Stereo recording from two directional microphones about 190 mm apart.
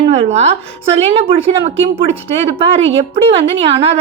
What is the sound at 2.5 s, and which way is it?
A woman's voice, 30° right (ahead or behind).